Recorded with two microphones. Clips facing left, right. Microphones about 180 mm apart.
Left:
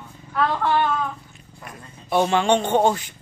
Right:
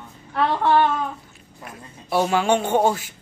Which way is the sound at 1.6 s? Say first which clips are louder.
Right 1 dB; 5° right (ahead or behind).